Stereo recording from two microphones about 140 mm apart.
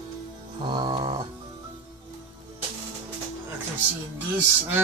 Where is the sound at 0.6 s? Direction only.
35° right (ahead or behind).